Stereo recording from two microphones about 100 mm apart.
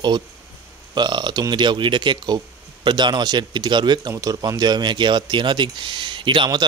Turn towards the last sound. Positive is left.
turn(degrees=-55)  # may be behind; listen again after turning